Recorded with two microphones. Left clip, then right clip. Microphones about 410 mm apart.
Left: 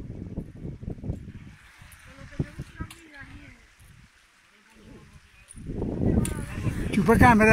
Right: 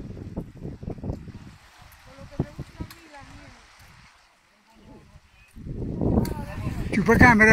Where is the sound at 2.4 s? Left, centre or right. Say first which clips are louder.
Right 3 dB; right.